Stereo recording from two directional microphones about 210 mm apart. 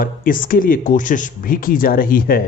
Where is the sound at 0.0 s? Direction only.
40° left (ahead or behind).